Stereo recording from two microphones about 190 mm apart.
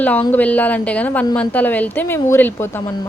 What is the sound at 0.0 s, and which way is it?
Speech, 10° left (ahead or behind).